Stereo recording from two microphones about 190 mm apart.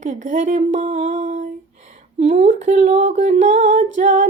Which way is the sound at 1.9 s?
40° right (ahead or behind).